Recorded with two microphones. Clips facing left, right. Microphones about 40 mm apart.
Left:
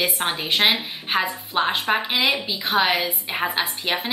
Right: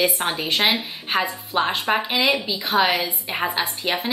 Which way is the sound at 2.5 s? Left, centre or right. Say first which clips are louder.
Even; left.